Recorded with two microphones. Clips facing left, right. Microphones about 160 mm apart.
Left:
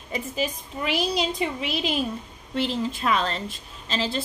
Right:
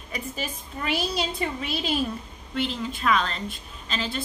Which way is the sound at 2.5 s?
35° left (ahead or behind).